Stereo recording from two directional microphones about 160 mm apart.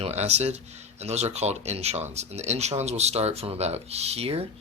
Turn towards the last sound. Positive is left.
turn(degrees=-40)  # may be behind; listen again after turning